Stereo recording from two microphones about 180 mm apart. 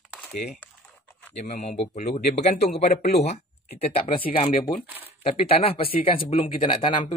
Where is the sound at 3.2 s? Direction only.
35° left (ahead or behind).